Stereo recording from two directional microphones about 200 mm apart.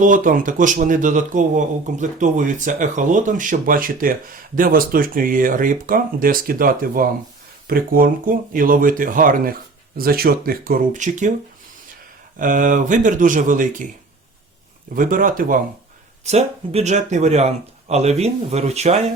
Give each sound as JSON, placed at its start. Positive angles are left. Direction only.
{"t": 0.0, "sound": "speech", "side_deg": -40}
{"t": 12.4, "sound": "speech", "side_deg": -40}
{"t": 14.9, "sound": "speech", "side_deg": -45}